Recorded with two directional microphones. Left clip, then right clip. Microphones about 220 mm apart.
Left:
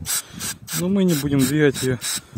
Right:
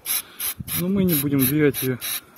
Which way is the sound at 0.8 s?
40° left (ahead or behind).